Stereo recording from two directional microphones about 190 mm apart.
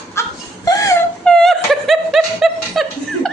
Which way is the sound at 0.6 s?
15° left (ahead or behind).